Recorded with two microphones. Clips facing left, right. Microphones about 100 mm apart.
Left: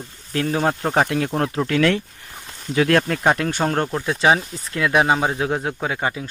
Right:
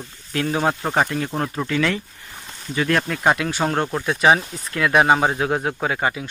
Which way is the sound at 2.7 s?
80° left.